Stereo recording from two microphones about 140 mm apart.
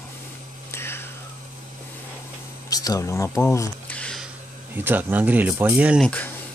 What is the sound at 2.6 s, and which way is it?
Speech, 25° left (ahead or behind).